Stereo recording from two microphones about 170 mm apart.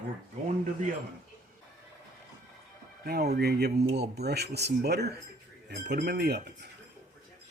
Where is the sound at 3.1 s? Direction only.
70° right (ahead or behind).